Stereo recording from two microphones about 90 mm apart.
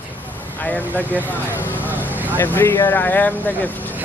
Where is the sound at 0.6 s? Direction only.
20° left (ahead or behind).